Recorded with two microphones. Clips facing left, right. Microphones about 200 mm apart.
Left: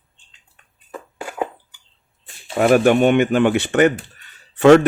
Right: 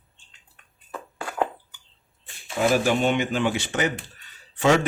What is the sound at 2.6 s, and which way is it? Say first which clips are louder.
Speech: left 7 dB; 60° left (ahead or behind).